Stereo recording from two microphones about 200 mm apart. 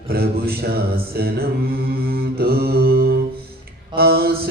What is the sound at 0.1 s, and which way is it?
Mantra, 50° right (ahead or behind).